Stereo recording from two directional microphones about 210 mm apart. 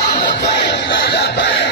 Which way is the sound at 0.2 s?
55° left (ahead or behind).